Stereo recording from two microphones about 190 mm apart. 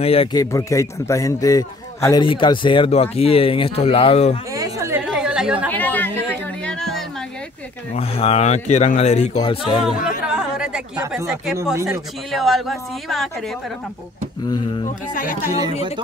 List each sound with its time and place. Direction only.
0.0 s speech: 30° left (ahead or behind)
0.4 s a man's voice: 15° left (ahead or behind); by 4.4 s 30° left (ahead or behind)
4.6 s chatter: 15° right (ahead or behind)
5.0 s chatter: 5° right (ahead or behind)
5.7 s chatter: 10° left (ahead or behind)
6.6 s a sound: 5° left (ahead or behind)
7.9 s speech: 30° left (ahead or behind)
10.2 s chatter: 5° right (ahead or behind)
11.7 s speech: 15° right (ahead or behind)
12.3 s speech: centre (ahead or behind)
15.1 s speech: 45° left (ahead or behind)